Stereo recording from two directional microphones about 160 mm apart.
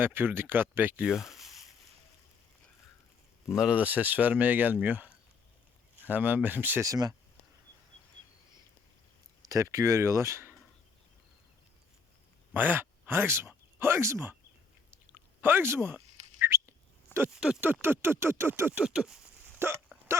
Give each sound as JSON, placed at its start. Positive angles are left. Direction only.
{"t": 0.0, "sound": "speech", "side_deg": -15}
{"t": 3.5, "sound": "speech", "side_deg": -5}
{"t": 9.5, "sound": "speech", "side_deg": -20}
{"t": 12.5, "sound": "speech", "side_deg": -10}
{"t": 15.1, "sound": "a sound", "side_deg": -15}
{"t": 16.4, "sound": "bird", "side_deg": -15}
{"t": 17.2, "sound": "speech", "side_deg": -10}
{"t": 19.9, "sound": "hiccup", "side_deg": -10}